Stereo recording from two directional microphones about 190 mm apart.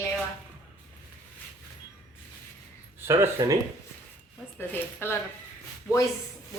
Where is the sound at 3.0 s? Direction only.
15° right (ahead or behind).